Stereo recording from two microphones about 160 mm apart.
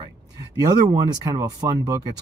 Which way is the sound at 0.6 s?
25° right (ahead or behind).